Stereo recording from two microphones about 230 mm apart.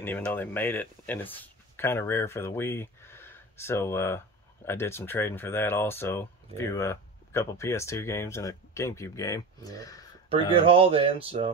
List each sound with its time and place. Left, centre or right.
0.0 s speech: centre
10.6 s music: right